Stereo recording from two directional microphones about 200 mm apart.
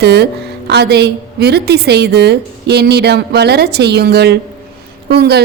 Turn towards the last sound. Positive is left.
turn(degrees=-55)  # may be behind; listen again after turning